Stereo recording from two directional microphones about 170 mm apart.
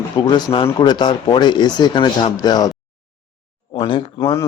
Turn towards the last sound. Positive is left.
turn(degrees=30)  # may be behind; listen again after turning